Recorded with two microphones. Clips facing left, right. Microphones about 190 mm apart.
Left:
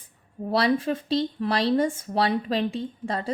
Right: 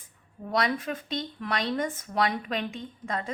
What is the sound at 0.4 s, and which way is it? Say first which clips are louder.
A woman's voice: left 5 dB; 30° left (ahead or behind).